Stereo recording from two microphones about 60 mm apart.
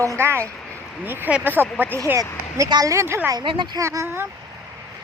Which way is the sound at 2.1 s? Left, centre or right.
Right.